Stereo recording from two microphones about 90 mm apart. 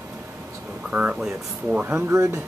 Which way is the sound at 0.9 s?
15° right (ahead or behind).